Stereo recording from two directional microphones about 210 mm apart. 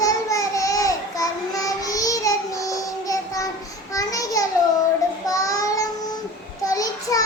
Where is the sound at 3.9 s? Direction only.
15° left (ahead or behind).